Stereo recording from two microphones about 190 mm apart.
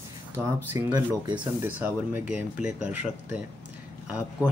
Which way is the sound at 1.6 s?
10° right (ahead or behind).